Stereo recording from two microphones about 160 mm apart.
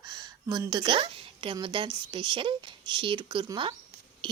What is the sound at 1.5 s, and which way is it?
Speech, 30° right (ahead or behind).